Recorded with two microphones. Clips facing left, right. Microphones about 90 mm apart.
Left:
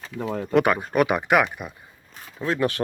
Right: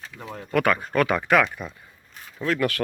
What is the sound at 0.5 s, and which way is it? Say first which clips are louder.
Speech: left 1 dB; 20° left (ahead or behind).